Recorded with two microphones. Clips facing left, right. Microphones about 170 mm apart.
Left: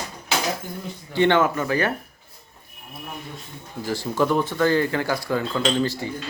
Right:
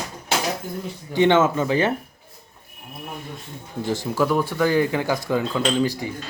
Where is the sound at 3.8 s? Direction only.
15° right (ahead or behind).